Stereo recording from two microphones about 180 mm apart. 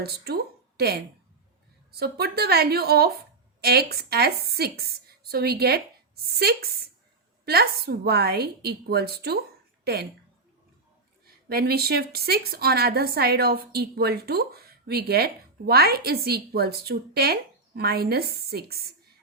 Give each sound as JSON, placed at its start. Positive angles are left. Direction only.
{"t": 0.3, "sound": "a sound", "side_deg": -60}
{"t": 0.8, "sound": "a woman's voice", "side_deg": -60}
{"t": 11.4, "sound": "a woman's voice", "side_deg": -60}